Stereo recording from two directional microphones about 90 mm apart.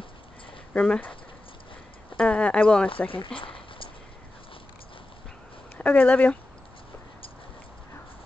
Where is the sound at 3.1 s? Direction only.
75° left (ahead or behind).